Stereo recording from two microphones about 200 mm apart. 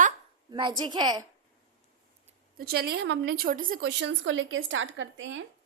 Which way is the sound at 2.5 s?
50° right (ahead or behind).